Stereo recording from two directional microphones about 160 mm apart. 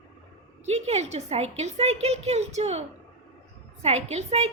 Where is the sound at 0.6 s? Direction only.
40° right (ahead or behind).